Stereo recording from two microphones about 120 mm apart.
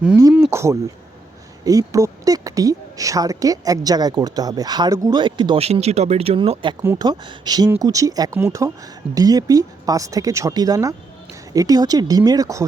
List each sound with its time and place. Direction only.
0.5 s a woman's voice: 25° right (ahead or behind); by 5.5 s 40° right (ahead or behind)
5.5 s a woman's voice: 60° right (ahead or behind); by 12.6 s 30° right (ahead or behind)